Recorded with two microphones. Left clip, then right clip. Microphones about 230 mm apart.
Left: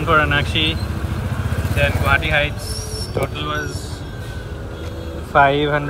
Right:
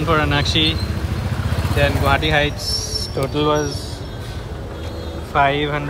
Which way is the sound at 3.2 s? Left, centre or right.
Centre.